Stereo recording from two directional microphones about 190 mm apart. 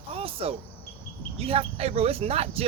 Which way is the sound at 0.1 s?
30° right (ahead or behind).